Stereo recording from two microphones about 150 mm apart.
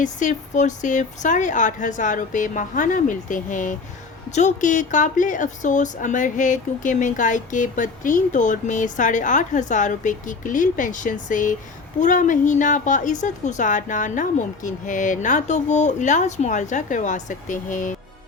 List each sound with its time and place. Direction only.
0.0 s a woman's voice: 55° left (ahead or behind)